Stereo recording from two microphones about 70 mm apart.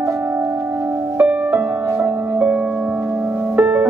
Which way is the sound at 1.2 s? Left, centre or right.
Right.